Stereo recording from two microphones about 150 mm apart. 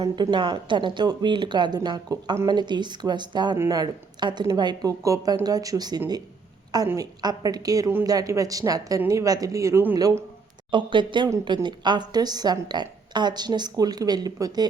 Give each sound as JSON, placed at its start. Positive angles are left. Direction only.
{"t": 0.0, "sound": "a woman's voice", "side_deg": -30}